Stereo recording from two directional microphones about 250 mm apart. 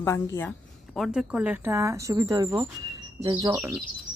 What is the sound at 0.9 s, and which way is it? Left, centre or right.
Speech, centre.